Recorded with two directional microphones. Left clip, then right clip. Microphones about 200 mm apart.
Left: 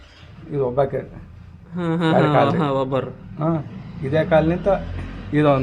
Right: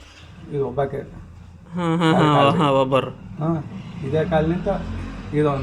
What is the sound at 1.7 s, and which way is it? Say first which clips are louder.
Speech: even; 5° left (ahead or behind).